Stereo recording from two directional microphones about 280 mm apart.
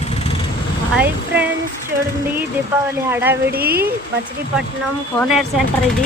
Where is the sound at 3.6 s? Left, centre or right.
Right.